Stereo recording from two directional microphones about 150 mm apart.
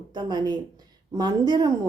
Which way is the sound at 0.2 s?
30° right (ahead or behind).